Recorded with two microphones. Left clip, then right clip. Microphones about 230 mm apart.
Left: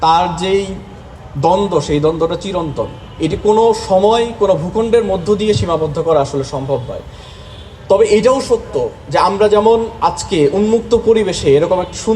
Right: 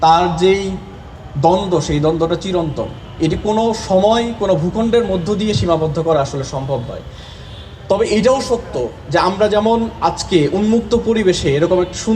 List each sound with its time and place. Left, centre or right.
0.0 s a man's voice: left
7.9 s a man's voice: left